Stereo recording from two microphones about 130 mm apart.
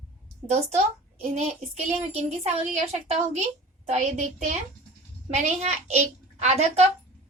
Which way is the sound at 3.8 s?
65° right (ahead or behind).